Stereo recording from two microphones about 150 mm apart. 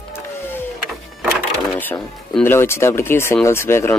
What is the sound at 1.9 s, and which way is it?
Speech, 15° left (ahead or behind).